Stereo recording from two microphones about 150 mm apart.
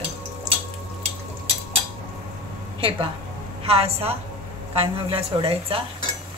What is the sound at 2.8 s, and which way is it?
Speech, 35° right (ahead or behind).